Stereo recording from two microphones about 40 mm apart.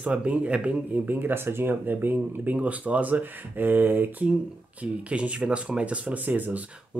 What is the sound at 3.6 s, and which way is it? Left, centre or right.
Speech, right.